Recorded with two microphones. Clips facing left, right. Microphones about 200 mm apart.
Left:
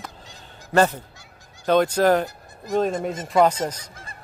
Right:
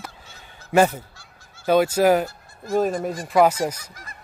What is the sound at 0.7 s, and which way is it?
Goose, 10° right (ahead or behind).